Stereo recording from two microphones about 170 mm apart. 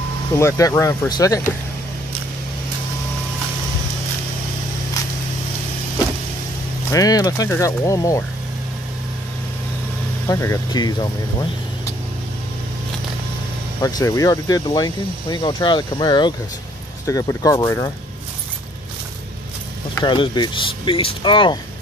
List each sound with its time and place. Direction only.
0.3 s speech: 15° left (ahead or behind)
6.9 s speech: 20° left (ahead or behind)
10.2 s speech: 15° left (ahead or behind)
13.7 s speech: 20° left (ahead or behind)
20.0 s speech: 25° left (ahead or behind)